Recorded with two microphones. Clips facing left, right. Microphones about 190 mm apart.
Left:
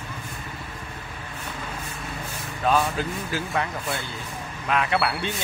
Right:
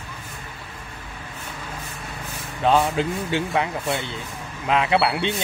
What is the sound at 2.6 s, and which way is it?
A man's voice, 25° right (ahead or behind).